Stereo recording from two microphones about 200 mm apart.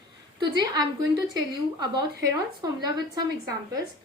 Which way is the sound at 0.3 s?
20° right (ahead or behind).